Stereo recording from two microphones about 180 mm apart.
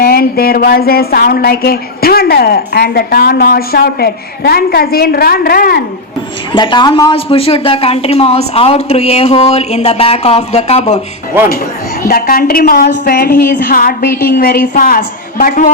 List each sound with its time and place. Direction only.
0.0 s speech: 55° left (ahead or behind)
6.5 s a man's voice: 25° left (ahead or behind)
12.0 s a woman's voice: 55° left (ahead or behind)